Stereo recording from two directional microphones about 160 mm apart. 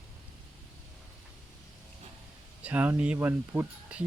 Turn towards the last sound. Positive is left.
turn(degrees=-10)  # may be behind; listen again after turning